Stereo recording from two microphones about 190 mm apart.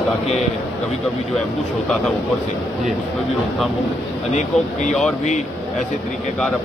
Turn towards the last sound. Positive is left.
turn(degrees=35)  # may be behind; listen again after turning